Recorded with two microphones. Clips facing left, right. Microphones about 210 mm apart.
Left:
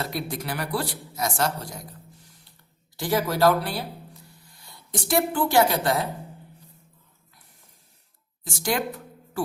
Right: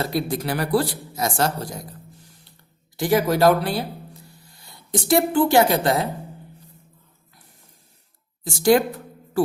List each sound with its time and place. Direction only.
0.0 s speech: 35° right (ahead or behind)
2.9 s a woman's voice: 15° right (ahead or behind)
5.0 s a woman's voice: 25° right (ahead or behind)
8.4 s speech: 30° right (ahead or behind)